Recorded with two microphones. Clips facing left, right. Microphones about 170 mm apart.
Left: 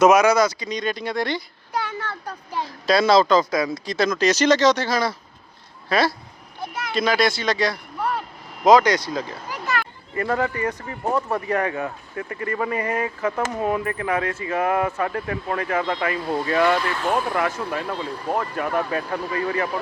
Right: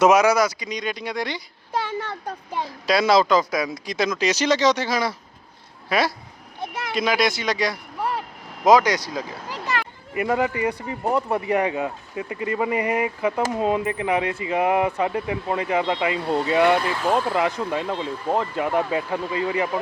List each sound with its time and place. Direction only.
0.0 s speech: 15° right (ahead or behind)
1.7 s speech: 25° right (ahead or behind)
6.6 s a sound: 25° right (ahead or behind)
6.9 s speech: 15° right (ahead or behind)
10.2 s speech: 15° right (ahead or behind)